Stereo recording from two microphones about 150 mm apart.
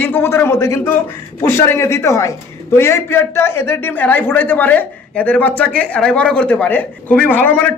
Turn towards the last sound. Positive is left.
turn(degrees=10)  # may be behind; listen again after turning